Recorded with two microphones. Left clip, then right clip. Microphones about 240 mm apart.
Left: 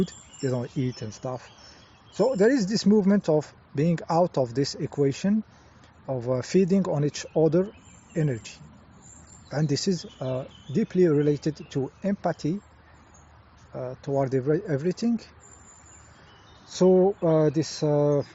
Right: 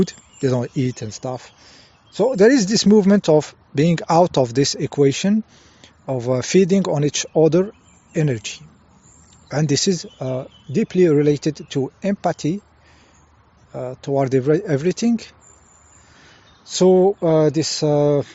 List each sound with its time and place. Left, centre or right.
0.0 s speech: right
13.7 s speech: right
16.6 s speech: right